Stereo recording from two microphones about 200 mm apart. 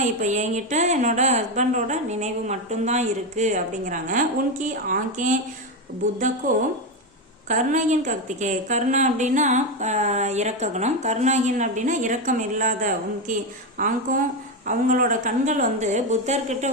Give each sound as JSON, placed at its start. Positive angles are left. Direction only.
{"t": 0.0, "sound": "a woman's voice", "side_deg": -35}
{"t": 7.4, "sound": "a woman's voice", "side_deg": -40}